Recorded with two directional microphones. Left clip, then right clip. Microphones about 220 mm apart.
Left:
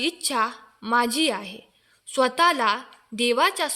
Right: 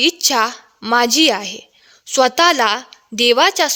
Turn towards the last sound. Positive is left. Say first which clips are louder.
# right 9 dB
turn(degrees=-40)  # may be behind; listen again after turning